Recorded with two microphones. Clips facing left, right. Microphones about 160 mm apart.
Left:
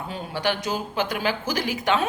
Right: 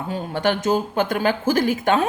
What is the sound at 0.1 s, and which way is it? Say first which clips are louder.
A woman's voice: right 5 dB; 50° right (ahead or behind).